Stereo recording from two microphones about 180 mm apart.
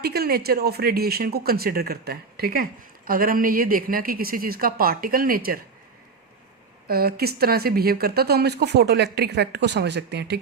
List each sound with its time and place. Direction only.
0.0 s speech: 60° right (ahead or behind)
6.8 s speech: 60° right (ahead or behind)